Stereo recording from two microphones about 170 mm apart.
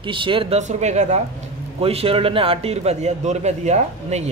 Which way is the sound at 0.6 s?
45° right (ahead or behind).